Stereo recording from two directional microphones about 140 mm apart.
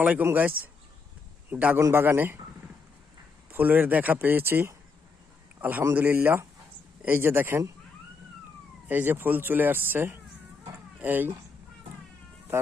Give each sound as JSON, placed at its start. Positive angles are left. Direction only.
{"t": 0.0, "sound": "speech", "side_deg": -10}
{"t": 3.5, "sound": "speech", "side_deg": -15}
{"t": 8.9, "sound": "speech", "side_deg": -15}